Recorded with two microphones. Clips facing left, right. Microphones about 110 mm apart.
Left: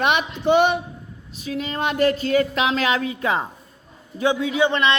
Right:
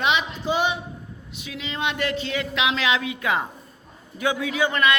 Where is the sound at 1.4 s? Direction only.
40° left (ahead or behind).